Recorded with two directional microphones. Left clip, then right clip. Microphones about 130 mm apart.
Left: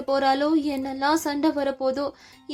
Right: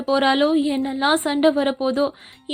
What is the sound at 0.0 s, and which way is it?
A woman's voice, 25° right (ahead or behind).